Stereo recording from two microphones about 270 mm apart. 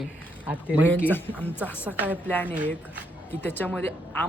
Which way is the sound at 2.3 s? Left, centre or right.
Centre.